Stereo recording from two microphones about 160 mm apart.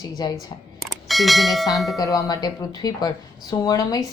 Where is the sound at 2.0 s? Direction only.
20° left (ahead or behind).